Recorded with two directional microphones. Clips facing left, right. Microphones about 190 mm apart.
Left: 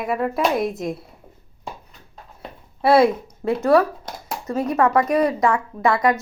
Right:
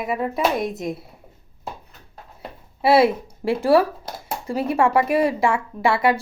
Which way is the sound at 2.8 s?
5° right (ahead or behind).